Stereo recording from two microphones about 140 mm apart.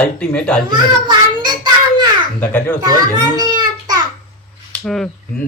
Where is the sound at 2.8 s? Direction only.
30° right (ahead or behind).